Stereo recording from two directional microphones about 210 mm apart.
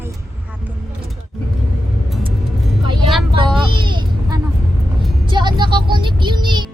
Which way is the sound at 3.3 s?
25° right (ahead or behind).